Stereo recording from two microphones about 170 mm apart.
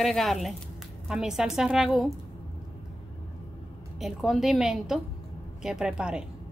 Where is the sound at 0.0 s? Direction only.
Centre (ahead or behind).